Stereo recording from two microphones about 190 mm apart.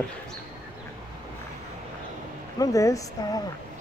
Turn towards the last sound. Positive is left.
turn(degrees=20)  # may be behind; listen again after turning